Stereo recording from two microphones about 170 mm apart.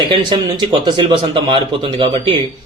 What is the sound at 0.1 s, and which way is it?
Speech, 30° right (ahead or behind).